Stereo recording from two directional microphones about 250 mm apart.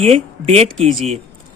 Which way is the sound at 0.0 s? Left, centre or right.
Right.